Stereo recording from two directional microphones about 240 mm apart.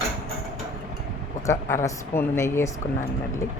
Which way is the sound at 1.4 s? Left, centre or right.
Centre.